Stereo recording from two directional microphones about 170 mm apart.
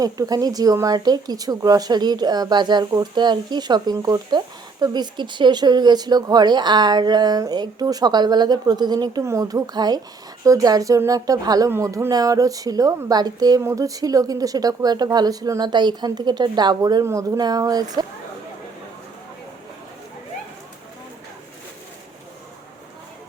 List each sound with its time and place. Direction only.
0.0 s speech: 20° right (ahead or behind)